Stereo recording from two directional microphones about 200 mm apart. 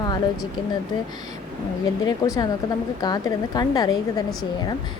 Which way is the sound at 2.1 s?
20° left (ahead or behind).